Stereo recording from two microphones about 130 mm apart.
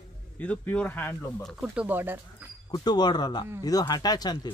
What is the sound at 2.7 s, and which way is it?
Speech, 35° left (ahead or behind).